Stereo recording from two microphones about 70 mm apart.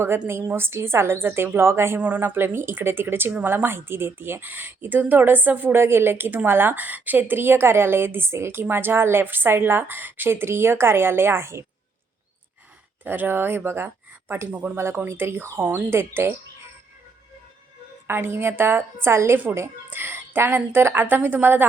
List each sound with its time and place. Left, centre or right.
0.3 s speech: right
2.0 s a woman's voice: right
13.1 s speech: right
18.1 s speech: right
19.9 s a sound: right
20.7 s a woman's voice: right